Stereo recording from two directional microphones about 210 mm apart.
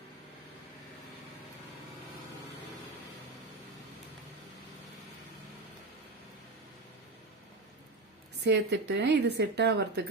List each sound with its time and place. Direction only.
8.4 s a woman's voice: 55° right (ahead or behind)